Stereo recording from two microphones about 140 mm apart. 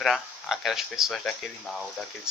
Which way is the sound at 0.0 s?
Centre (ahead or behind).